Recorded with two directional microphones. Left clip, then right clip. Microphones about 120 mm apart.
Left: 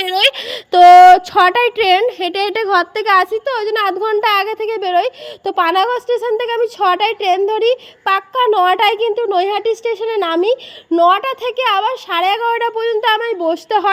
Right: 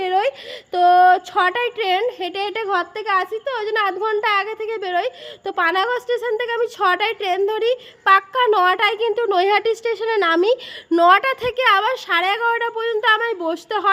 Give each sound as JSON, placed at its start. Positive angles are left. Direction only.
{"t": 0.5, "sound": "a sound", "side_deg": 65}
{"t": 1.0, "sound": "speech", "side_deg": 45}
{"t": 3.6, "sound": "a woman's voice", "side_deg": 20}
{"t": 8.0, "sound": "speech", "side_deg": 10}
{"t": 9.1, "sound": "speech", "side_deg": 5}
{"t": 10.9, "sound": "a woman's voice", "side_deg": 0}